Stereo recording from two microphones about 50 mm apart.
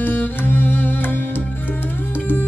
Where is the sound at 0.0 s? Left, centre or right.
Left.